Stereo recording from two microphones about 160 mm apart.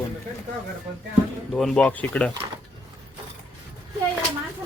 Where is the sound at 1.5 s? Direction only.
5° left (ahead or behind).